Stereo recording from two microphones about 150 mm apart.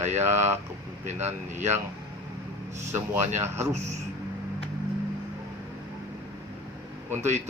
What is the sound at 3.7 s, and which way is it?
Speech, 50° right (ahead or behind).